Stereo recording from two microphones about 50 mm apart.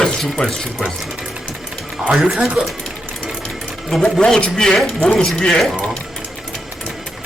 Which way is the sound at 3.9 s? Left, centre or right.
Centre.